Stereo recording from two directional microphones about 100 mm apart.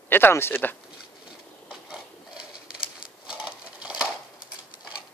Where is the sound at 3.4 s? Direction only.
10° right (ahead or behind).